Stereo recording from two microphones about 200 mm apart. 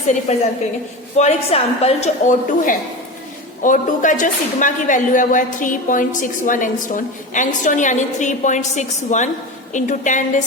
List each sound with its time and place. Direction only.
1.1 s a woman's voice: 35° left (ahead or behind)